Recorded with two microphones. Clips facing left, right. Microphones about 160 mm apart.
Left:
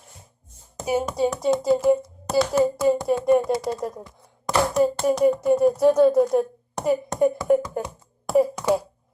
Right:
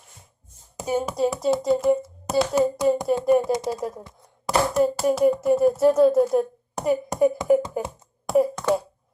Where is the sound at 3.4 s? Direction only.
20° right (ahead or behind).